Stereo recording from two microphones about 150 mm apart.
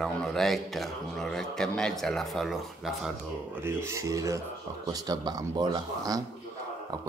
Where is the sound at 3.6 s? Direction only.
20° right (ahead or behind).